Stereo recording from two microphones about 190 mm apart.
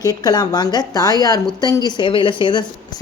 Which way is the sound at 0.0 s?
20° left (ahead or behind).